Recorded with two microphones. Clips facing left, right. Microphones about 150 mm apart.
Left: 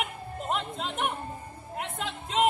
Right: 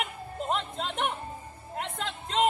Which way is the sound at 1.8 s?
5° left (ahead or behind).